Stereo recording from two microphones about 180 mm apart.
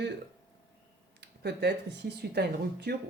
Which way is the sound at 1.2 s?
70° right (ahead or behind).